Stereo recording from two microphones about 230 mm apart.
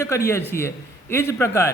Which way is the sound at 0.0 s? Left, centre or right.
Centre.